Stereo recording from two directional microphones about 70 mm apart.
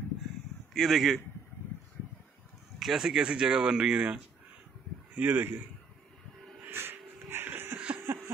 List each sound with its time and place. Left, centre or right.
0.7 s a man's voice: centre
2.8 s speech: centre
5.1 s speech: right
6.6 s wheeze: right
8.1 s a sound: right